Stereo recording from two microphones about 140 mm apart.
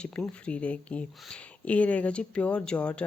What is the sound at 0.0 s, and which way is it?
Speech, 5° left (ahead or behind).